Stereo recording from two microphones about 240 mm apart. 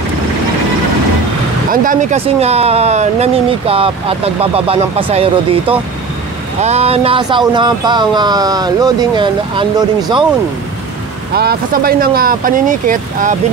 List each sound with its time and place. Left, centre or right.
1.7 s speech: right
11.3 s speech: right